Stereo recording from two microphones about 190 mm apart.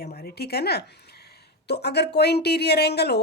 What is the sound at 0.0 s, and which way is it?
Speech, 55° left (ahead or behind).